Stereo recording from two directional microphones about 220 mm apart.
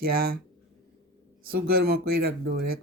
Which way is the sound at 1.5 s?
45° right (ahead or behind).